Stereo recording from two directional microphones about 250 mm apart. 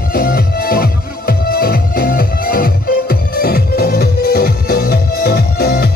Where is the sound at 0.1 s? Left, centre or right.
Left.